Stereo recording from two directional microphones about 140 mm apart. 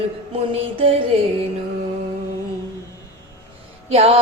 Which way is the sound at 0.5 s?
45° right (ahead or behind).